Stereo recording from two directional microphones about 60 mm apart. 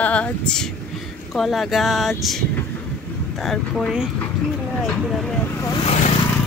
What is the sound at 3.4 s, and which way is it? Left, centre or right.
Speech, centre.